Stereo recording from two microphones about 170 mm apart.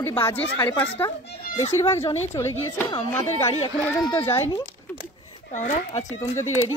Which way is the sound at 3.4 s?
35° left (ahead or behind).